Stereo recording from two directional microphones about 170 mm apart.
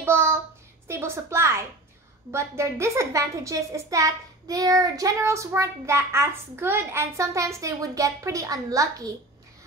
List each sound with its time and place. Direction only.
0.0 s child singing: 15° right (ahead or behind)
0.8 s a woman's voice: 15° right (ahead or behind)